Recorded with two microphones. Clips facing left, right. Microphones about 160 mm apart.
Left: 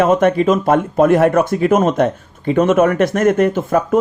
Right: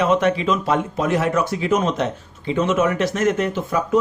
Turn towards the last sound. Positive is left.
turn(degrees=50)  # may be behind; listen again after turning